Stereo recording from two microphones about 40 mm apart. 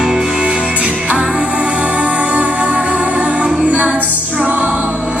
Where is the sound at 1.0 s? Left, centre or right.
Right.